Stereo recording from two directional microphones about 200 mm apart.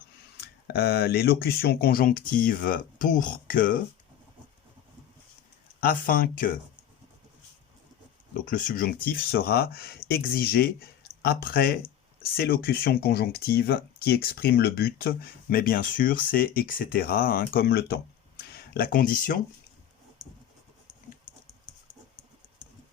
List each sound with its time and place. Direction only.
0.4 s speech: 50° left (ahead or behind)
5.8 s speech: 45° left (ahead or behind)
8.3 s speech: 40° left (ahead or behind)
20.2 s scratch: centre (ahead or behind)
21.7 s a sound: 35° right (ahead or behind)